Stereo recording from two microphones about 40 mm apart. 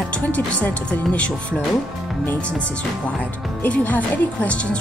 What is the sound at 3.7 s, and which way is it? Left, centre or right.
Speech, left.